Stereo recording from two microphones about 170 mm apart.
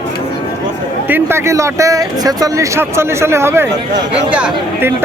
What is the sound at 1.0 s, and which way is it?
Speech, 15° right (ahead or behind).